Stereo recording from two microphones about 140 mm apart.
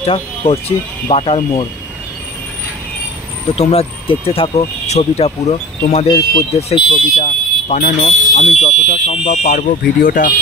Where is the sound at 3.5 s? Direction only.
45° left (ahead or behind).